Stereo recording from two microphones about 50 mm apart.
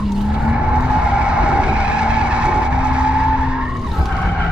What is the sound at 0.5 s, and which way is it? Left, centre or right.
Vehicle, right.